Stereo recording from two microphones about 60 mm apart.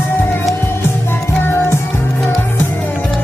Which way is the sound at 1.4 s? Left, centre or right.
Left.